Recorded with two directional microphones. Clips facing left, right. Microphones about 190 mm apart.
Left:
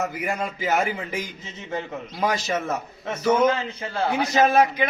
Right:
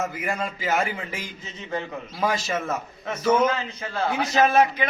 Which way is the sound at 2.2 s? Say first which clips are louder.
Left 1 dB; 15° left (ahead or behind).